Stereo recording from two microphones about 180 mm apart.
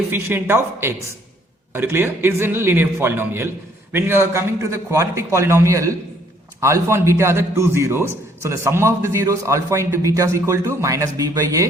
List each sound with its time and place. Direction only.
0.1 s a man's voice: 15° right (ahead or behind)